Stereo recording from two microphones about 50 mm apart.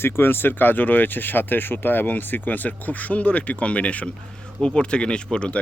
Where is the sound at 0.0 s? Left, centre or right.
Left.